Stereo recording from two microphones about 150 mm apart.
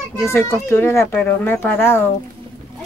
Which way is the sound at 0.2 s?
15° left (ahead or behind).